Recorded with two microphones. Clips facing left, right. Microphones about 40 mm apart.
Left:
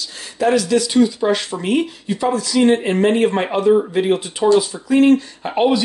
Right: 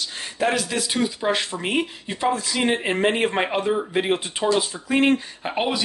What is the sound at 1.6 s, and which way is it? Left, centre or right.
Speech, right.